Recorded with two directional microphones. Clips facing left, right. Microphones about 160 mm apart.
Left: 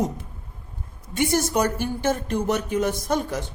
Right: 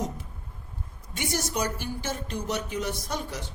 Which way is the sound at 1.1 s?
55° left (ahead or behind).